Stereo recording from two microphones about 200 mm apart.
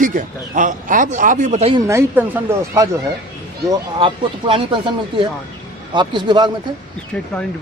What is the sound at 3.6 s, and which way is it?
Speech, 25° right (ahead or behind).